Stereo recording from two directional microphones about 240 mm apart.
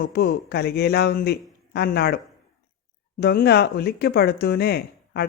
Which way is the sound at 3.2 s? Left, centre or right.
Left.